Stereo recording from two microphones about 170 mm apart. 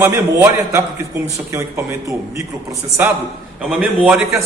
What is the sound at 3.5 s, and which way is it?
Speech, 5° right (ahead or behind).